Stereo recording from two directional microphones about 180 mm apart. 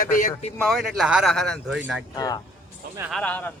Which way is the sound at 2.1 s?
20° left (ahead or behind).